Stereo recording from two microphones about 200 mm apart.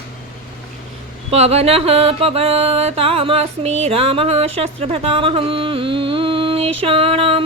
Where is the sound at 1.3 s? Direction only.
30° right (ahead or behind).